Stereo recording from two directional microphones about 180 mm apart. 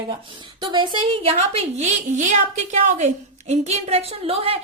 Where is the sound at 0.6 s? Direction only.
25° right (ahead or behind).